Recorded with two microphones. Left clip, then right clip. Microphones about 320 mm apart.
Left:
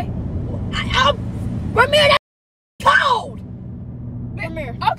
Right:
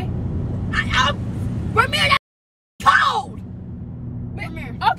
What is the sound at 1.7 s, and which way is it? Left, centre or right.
Speech, centre.